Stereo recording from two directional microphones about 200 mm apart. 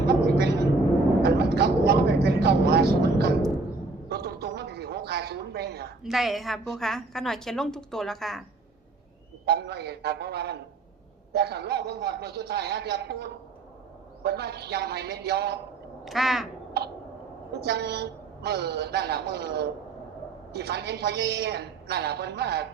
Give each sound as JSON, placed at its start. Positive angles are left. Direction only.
{"t": 1.2, "sound": "vehicle", "side_deg": -55}
{"t": 4.1, "sound": "a sound", "side_deg": -55}
{"t": 6.0, "sound": "a woman's voice", "side_deg": 0}
{"t": 9.5, "sound": "a woman's voice", "side_deg": -55}
{"t": 16.0, "sound": "a woman's voice", "side_deg": 0}
{"t": 16.8, "sound": "a woman's voice", "side_deg": -55}